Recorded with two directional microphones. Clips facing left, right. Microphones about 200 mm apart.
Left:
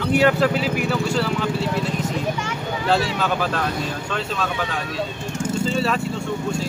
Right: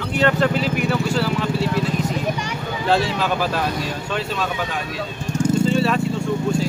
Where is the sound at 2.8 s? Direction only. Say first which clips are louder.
Right 1 dB; centre (ahead or behind).